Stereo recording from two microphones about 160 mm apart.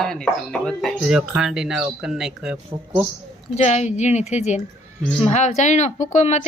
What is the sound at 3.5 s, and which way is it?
Speech, 45° left (ahead or behind).